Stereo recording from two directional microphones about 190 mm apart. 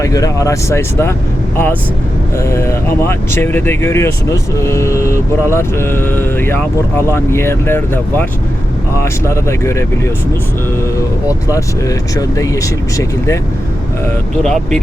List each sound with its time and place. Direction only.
0.0 s speech: 20° left (ahead or behind)
2.4 s speech: 15° left (ahead or behind)
9.2 s speech: 15° left (ahead or behind)
10.9 s speech: 15° left (ahead or behind)
14.4 s speech: 5° left (ahead or behind)